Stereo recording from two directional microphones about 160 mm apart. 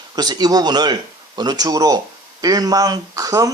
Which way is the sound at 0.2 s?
25° right (ahead or behind).